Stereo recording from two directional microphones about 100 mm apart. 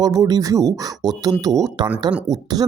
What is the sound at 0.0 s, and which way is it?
Speech, 40° right (ahead or behind).